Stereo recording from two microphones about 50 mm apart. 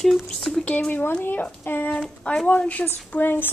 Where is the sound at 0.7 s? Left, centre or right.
Left.